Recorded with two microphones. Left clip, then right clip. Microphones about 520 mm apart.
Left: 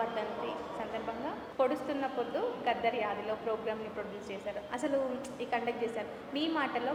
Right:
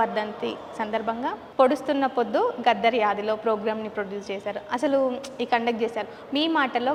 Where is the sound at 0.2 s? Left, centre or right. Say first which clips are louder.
Right 7 dB; right.